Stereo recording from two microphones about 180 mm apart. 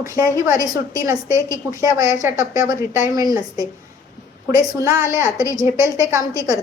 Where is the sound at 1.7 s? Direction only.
20° right (ahead or behind).